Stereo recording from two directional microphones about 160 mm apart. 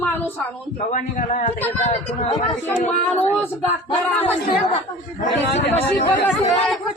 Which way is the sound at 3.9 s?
10° left (ahead or behind).